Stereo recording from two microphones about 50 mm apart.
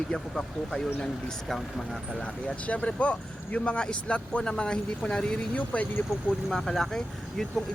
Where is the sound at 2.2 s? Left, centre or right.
Left.